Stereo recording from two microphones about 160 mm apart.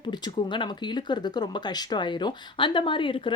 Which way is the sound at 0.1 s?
30° left (ahead or behind).